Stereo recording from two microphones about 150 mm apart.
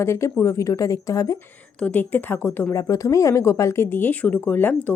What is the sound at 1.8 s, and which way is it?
A woman's voice, 10° left (ahead or behind).